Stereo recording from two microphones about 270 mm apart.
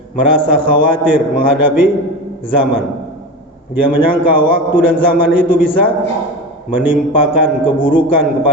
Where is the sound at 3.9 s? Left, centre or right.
Centre.